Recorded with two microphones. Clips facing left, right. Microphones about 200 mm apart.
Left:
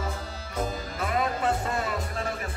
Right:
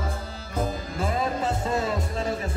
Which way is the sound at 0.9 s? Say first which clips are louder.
Right 1 dB; 25° right (ahead or behind).